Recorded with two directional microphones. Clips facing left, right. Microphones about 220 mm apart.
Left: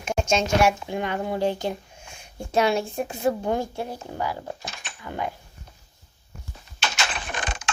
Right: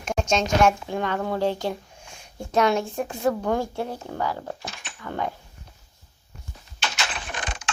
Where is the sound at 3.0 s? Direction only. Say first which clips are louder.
Even; 20° left (ahead or behind).